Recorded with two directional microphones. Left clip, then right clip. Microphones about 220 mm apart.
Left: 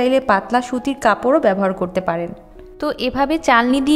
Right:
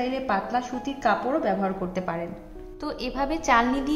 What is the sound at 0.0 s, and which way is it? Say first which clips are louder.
A woman's voice: left 11 dB; 45° left (ahead or behind).